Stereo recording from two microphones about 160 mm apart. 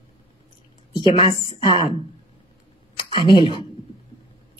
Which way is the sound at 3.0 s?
30° left (ahead or behind).